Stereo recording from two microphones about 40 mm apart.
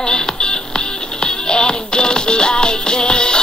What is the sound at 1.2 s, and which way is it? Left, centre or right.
Music, left.